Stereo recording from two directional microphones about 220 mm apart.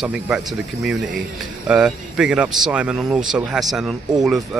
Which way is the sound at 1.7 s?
5° right (ahead or behind).